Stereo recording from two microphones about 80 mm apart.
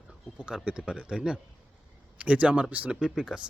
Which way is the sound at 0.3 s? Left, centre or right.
Centre.